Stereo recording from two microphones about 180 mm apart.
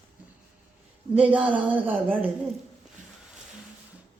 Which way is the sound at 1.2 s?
10° right (ahead or behind).